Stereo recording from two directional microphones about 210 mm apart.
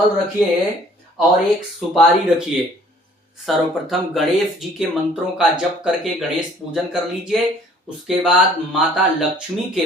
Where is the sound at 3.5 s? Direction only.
Centre (ahead or behind).